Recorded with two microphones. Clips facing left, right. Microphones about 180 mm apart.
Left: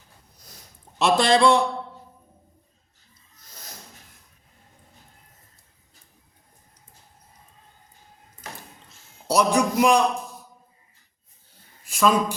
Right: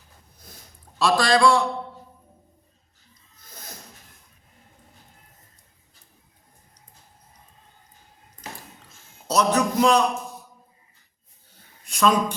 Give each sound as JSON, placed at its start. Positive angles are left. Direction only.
{"t": 0.9, "sound": "a man's voice", "side_deg": 20}
{"t": 9.2, "sound": "a man's voice", "side_deg": 10}
{"t": 11.9, "sound": "a sound", "side_deg": 5}